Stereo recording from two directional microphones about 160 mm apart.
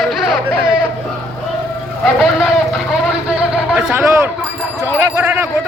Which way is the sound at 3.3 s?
10° right (ahead or behind).